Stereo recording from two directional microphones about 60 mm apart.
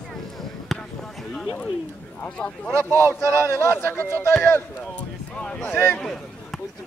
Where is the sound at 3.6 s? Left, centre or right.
Left.